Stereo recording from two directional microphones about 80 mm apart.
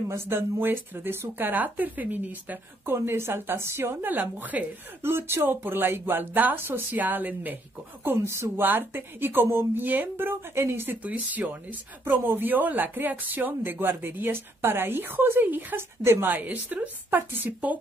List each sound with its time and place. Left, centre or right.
0.1 s speech: right